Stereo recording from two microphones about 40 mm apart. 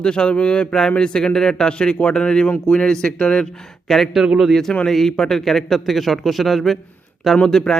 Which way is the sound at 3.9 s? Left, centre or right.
Centre.